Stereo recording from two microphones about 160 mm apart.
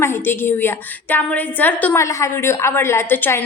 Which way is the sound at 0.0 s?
15° left (ahead or behind).